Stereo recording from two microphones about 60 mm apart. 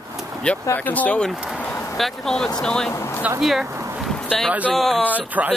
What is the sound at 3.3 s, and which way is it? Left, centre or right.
Speech, centre.